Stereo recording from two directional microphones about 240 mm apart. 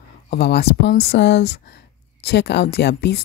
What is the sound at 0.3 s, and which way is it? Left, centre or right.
Speech, left.